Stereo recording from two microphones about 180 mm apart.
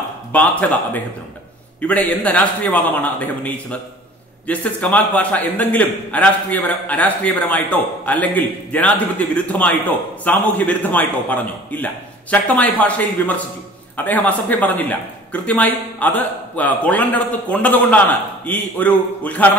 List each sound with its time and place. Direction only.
0.3 s a man's voice: 10° left (ahead or behind)